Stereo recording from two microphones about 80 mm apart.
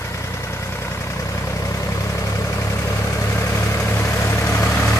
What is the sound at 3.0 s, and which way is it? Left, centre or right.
Vehicle, left.